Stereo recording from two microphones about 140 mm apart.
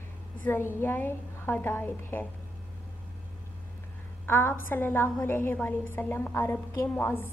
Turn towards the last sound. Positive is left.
turn(degrees=20)  # may be behind; listen again after turning